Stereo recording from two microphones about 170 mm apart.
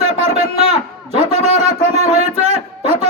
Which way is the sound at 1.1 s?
35° right (ahead or behind).